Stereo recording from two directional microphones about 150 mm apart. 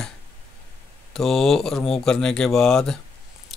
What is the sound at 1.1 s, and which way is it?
Speech, centre (ahead or behind).